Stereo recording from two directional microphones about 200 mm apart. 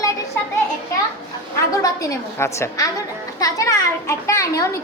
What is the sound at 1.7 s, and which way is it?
A child's voice, 15° left (ahead or behind).